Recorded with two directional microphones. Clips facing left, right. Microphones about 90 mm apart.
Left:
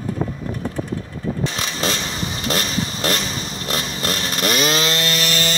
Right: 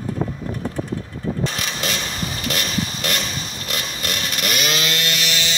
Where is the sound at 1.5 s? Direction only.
30° left (ahead or behind).